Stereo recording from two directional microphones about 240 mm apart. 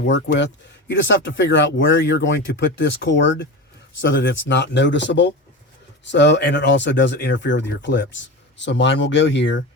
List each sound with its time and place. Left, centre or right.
0.0 s speech: left